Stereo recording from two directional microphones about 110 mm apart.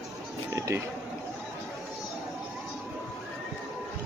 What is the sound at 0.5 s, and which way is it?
Speech, 25° right (ahead or behind).